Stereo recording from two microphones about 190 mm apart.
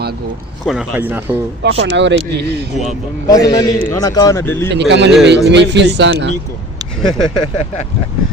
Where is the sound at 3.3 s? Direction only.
20° left (ahead or behind).